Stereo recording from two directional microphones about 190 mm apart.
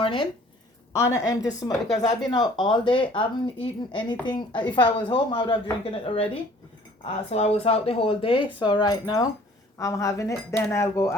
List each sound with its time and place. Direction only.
0.0 s speech: 25° left (ahead or behind)
0.9 s speech: 15° left (ahead or behind)